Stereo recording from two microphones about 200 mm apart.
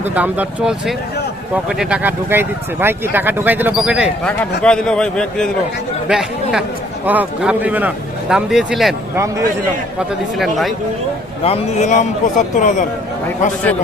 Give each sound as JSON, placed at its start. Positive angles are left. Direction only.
{"t": 0.0, "sound": "a man's voice", "side_deg": -5}
{"t": 10.3, "sound": "a man's voice", "side_deg": 0}
{"t": 11.4, "sound": "a man's voice", "side_deg": 35}